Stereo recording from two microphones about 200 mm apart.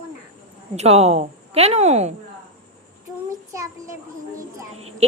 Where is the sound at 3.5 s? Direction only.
15° right (ahead or behind).